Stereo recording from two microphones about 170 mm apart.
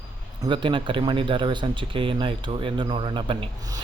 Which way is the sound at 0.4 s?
30° right (ahead or behind).